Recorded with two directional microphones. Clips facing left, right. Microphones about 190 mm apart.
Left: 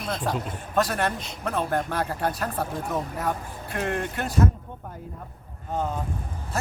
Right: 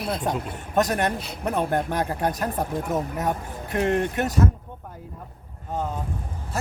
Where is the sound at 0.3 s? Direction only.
20° right (ahead or behind).